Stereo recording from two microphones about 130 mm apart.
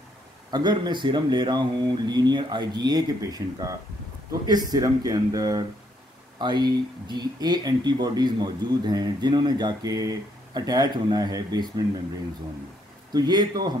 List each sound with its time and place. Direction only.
0.5 s speech: 30° right (ahead or behind)
13.1 s speech: 30° right (ahead or behind)